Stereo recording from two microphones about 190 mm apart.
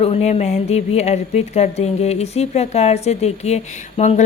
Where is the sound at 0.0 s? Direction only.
35° left (ahead or behind).